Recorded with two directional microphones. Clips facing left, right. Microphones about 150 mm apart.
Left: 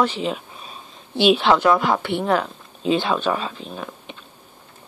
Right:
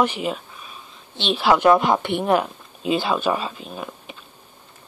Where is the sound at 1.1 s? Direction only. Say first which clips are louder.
Left 9 dB; 10° left (ahead or behind).